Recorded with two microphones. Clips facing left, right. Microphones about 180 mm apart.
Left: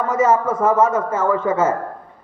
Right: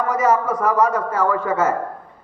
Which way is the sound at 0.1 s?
25° left (ahead or behind).